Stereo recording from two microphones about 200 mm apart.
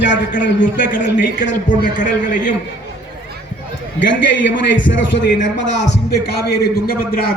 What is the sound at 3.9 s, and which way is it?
A man's voice, 65° left (ahead or behind).